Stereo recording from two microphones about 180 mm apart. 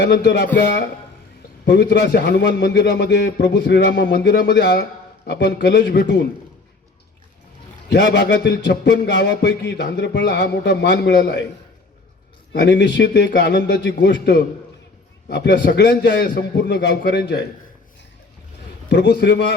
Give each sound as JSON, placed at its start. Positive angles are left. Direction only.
{"t": 0.0, "sound": "a man's voice", "side_deg": 75}
{"t": 1.6, "sound": "a man's voice", "side_deg": 70}
{"t": 7.9, "sound": "a man's voice", "side_deg": 70}
{"t": 12.5, "sound": "a man's voice", "side_deg": 75}
{"t": 18.9, "sound": "a man's voice", "side_deg": 70}